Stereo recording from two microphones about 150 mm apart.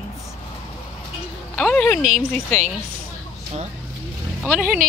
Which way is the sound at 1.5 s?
10° left (ahead or behind).